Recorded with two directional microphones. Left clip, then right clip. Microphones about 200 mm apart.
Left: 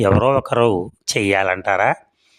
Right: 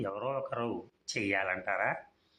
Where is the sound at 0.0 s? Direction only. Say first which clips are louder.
Left 19 dB; 60° left (ahead or behind).